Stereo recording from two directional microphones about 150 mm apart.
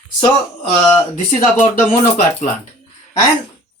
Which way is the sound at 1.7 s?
60° left (ahead or behind).